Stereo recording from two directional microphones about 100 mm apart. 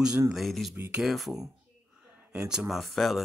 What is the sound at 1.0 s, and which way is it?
Speech, centre (ahead or behind).